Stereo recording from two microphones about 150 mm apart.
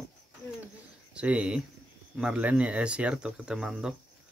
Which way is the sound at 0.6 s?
10° right (ahead or behind).